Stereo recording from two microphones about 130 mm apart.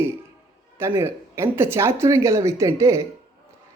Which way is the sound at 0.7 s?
20° right (ahead or behind).